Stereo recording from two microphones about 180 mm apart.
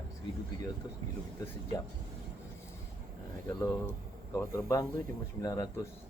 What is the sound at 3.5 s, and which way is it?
Speech, 15° left (ahead or behind).